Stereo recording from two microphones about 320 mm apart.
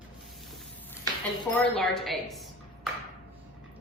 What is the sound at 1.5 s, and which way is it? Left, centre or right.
Speech, centre.